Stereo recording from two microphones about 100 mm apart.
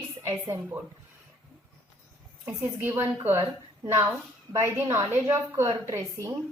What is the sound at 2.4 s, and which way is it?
A woman's voice, 20° right (ahead or behind).